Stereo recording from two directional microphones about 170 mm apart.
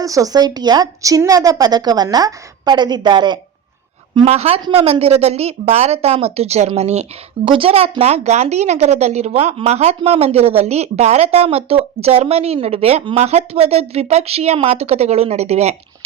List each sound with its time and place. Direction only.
0.0 s a woman's voice: 20° right (ahead or behind); by 15.7 s 40° right (ahead or behind)